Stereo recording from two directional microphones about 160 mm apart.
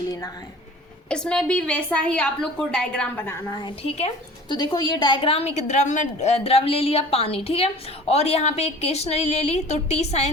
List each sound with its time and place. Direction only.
1.1 s a woman's voice: 5° left (ahead or behind)
3.5 s a woman's voice: 25° left (ahead or behind); by 10.2 s 45° left (ahead or behind)